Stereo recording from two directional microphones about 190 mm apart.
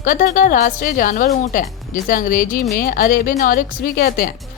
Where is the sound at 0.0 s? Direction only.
45° left (ahead or behind).